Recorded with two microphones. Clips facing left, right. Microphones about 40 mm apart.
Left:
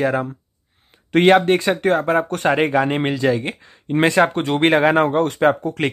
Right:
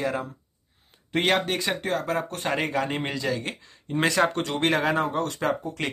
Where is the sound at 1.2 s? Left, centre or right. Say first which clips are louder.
Left 10 dB; left.